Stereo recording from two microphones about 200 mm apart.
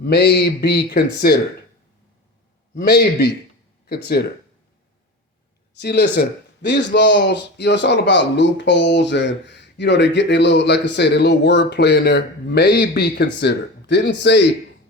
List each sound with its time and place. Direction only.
0.0 s speech: 55° left (ahead or behind)
2.7 s speech: 55° left (ahead or behind)
5.8 s speech: 55° left (ahead or behind)